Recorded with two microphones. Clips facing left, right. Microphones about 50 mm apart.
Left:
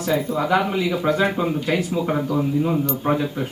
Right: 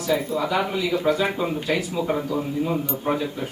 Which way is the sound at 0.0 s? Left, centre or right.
Left.